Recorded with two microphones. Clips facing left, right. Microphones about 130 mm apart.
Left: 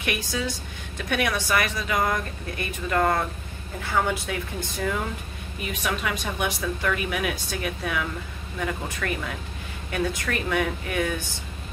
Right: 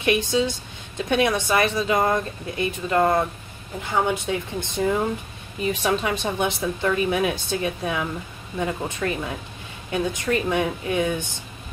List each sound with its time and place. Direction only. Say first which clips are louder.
0.0 s a woman's voice: right 7 dB; 25° right (ahead or behind)